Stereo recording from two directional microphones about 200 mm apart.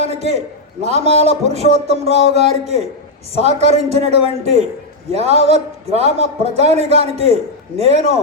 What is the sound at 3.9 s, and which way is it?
A man's voice, 35° right (ahead or behind).